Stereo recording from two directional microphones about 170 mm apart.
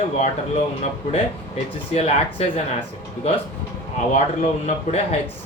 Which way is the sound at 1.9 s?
35° left (ahead or behind).